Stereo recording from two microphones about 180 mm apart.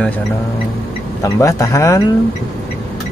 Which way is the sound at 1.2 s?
15° left (ahead or behind).